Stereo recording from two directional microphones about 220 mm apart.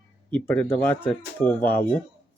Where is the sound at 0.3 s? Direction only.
5° left (ahead or behind).